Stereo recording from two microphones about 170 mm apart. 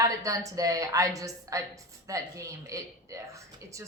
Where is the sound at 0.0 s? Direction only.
20° right (ahead or behind).